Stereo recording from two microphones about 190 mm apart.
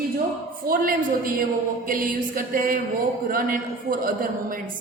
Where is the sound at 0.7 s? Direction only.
45° right (ahead or behind).